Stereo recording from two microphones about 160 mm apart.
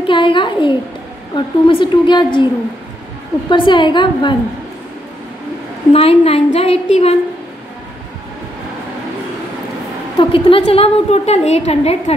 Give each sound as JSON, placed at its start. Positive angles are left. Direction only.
{"t": 0.0, "sound": "a child's voice", "side_deg": 30}
{"t": 3.4, "sound": "a woman's voice", "side_deg": 30}
{"t": 5.9, "sound": "a woman's voice", "side_deg": 40}
{"t": 10.1, "sound": "a woman's voice", "side_deg": 35}